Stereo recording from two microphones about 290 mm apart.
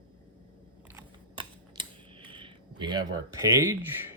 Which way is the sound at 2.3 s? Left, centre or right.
Centre.